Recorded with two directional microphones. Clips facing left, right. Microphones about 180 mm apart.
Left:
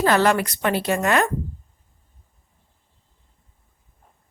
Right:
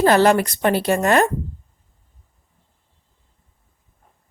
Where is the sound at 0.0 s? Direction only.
35° right (ahead or behind).